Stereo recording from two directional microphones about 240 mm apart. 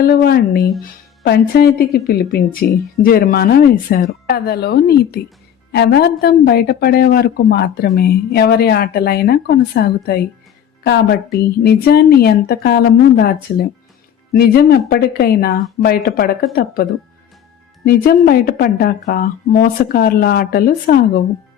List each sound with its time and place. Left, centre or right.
0.0 s a woman's voice: left
18.3 s speech: left